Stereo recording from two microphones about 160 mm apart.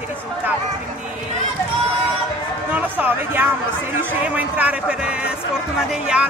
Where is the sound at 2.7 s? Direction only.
10° right (ahead or behind).